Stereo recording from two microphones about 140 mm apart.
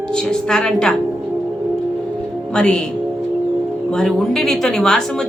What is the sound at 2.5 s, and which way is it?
Speech, 5° left (ahead or behind).